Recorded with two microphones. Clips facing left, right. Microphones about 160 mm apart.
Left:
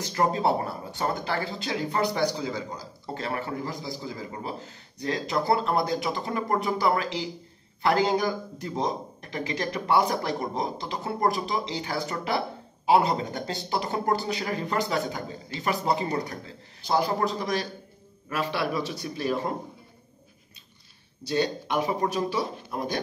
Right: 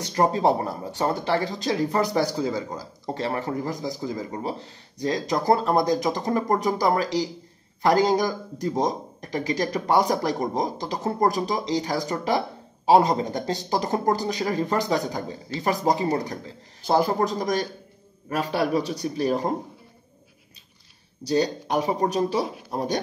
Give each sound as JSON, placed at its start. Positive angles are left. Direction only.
{"t": 0.1, "sound": "speech", "side_deg": -35}
{"t": 21.3, "sound": "speech", "side_deg": -35}